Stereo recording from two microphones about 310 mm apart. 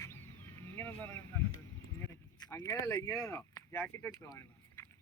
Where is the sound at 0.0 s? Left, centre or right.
Centre.